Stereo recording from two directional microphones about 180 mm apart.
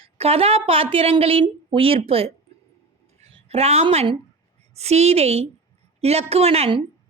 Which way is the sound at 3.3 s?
35° right (ahead or behind).